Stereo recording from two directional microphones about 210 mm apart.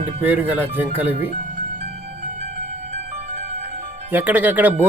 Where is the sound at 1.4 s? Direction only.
35° right (ahead or behind).